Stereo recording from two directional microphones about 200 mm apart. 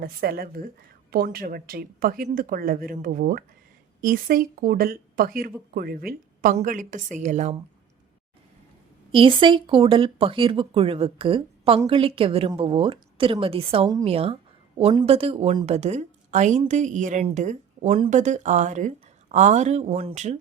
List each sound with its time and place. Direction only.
0.0 s speech: 50° right (ahead or behind)
9.1 s a woman's voice: 25° right (ahead or behind)